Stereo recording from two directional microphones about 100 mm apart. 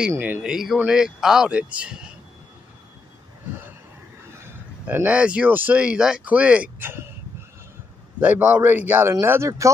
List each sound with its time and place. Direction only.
0.2 s speech: 15° right (ahead or behind)
0.5 s speech: 5° right (ahead or behind)
4.8 s speech: 15° right (ahead or behind)
8.2 s a man's voice: 20° right (ahead or behind)